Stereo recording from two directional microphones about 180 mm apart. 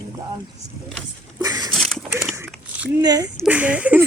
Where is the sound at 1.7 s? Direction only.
Centre (ahead or behind).